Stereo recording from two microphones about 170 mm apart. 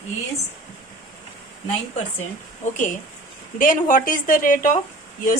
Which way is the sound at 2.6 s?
45° left (ahead or behind).